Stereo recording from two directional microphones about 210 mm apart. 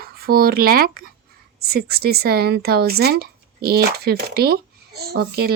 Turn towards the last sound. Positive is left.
turn(degrees=-45)  # may be behind; listen again after turning